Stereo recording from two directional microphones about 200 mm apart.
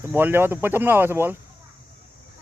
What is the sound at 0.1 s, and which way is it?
Speech, 10° right (ahead or behind).